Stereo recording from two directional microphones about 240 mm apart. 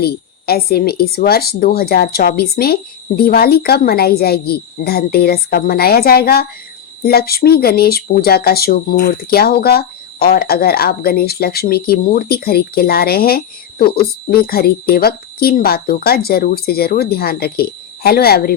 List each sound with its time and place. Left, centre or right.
0.0 s speech: left